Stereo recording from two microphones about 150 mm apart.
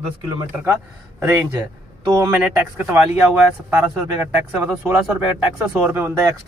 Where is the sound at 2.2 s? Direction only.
10° right (ahead or behind).